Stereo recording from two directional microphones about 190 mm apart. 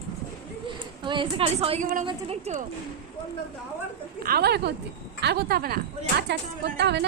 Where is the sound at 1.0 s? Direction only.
25° right (ahead or behind).